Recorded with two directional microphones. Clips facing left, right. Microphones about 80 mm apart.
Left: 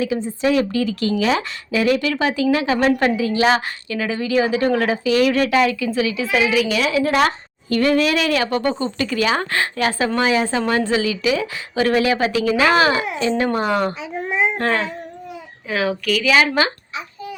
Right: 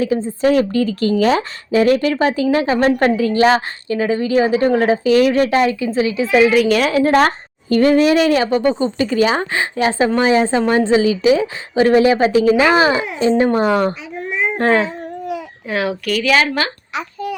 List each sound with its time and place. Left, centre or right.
0.0 s a woman's voice: right
6.5 s a woman's voice: right
15.7 s speech: centre
16.3 s speech: centre
16.9 s a sound: right